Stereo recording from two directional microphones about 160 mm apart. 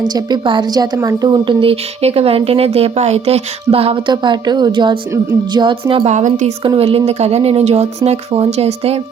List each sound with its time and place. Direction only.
0.1 s a woman's voice: 30° right (ahead or behind)
5.9 s a woman's voice: 40° right (ahead or behind)
6.6 s a woman's voice: 35° right (ahead or behind)